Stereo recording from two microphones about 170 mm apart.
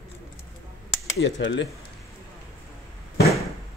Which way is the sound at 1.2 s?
90° left.